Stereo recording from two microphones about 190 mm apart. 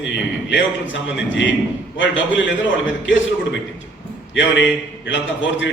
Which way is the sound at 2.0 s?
80° left.